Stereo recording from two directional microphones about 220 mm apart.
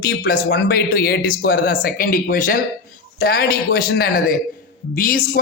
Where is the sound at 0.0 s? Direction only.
45° left (ahead or behind).